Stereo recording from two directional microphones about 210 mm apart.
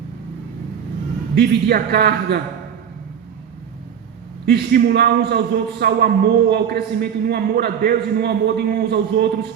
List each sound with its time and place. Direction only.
1.4 s a man's voice: 50° right (ahead or behind)
4.4 s a man's voice: 50° right (ahead or behind)